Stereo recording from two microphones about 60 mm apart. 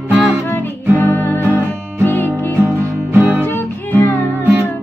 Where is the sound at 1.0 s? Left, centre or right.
Left.